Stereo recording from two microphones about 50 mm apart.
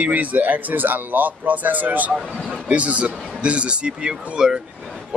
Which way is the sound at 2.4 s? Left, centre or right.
Right.